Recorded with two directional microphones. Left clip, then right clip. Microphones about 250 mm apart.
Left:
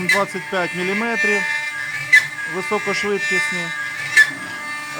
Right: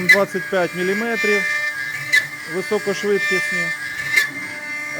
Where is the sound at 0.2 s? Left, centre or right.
Centre.